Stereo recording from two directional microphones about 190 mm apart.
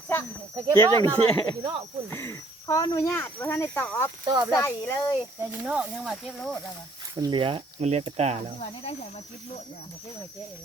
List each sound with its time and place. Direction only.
0.5 s speech: 25° right (ahead or behind)
2.0 s speech: 15° left (ahead or behind)
5.4 s speech: 5° right (ahead or behind)
7.2 s speech: 25° right (ahead or behind)
8.6 s speech: 30° left (ahead or behind)